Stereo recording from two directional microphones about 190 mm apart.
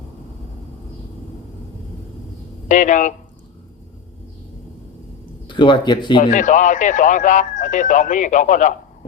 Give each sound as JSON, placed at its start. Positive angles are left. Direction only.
{"t": 2.6, "sound": "speech", "side_deg": 40}
{"t": 5.5, "sound": "speech", "side_deg": 25}
{"t": 6.2, "sound": "speech", "side_deg": 40}